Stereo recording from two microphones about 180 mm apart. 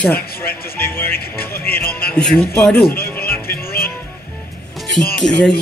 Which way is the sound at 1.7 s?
55° left (ahead or behind).